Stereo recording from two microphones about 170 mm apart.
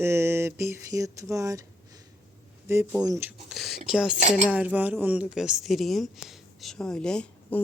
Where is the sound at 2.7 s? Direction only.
15° right (ahead or behind).